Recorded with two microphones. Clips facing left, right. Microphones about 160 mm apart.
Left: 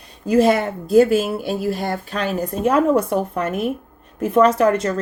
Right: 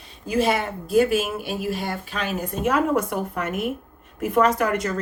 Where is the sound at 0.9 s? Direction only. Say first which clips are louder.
Left 5 dB; 35° left (ahead or behind).